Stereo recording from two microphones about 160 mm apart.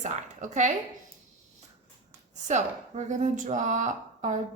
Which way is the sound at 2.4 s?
50° right (ahead or behind).